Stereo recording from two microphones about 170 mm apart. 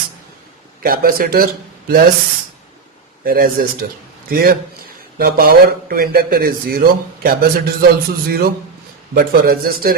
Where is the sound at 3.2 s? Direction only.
60° right (ahead or behind).